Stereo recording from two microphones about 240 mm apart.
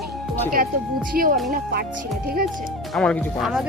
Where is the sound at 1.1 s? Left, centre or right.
Right.